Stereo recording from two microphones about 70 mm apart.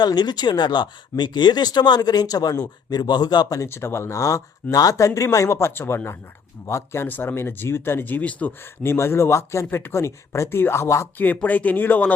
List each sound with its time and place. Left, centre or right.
0.0 s speech: left
3.7 s speech: left
7.1 s speech: left
8.8 s speech: left
9.6 s speech: left
11.4 s speech: left